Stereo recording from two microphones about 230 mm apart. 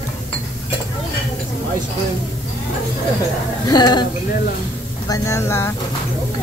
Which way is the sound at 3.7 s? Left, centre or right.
Centre.